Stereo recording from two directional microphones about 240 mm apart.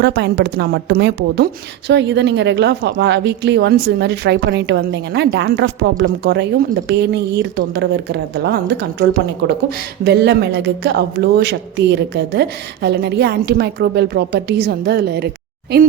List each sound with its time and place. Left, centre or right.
0.0 s speech: right